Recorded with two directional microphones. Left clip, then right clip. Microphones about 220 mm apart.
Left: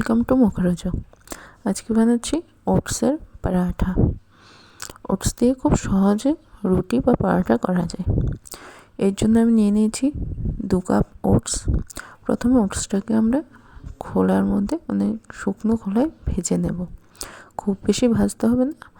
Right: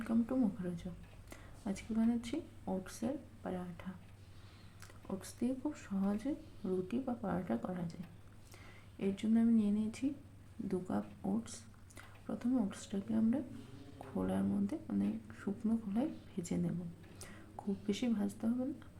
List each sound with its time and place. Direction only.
0.0 s speech: 50° left (ahead or behind)